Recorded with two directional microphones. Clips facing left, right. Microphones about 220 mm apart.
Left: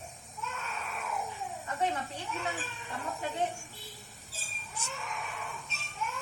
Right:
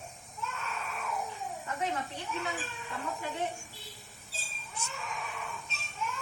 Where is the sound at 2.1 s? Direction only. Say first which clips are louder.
Even; centre (ahead or behind).